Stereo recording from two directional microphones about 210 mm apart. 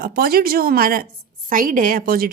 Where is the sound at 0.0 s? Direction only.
45° right (ahead or behind).